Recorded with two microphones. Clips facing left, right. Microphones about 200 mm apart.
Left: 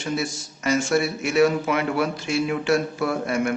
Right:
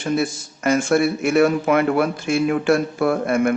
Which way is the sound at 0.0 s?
55° right (ahead or behind).